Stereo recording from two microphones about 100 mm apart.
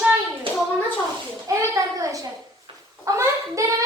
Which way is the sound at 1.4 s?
35° right (ahead or behind).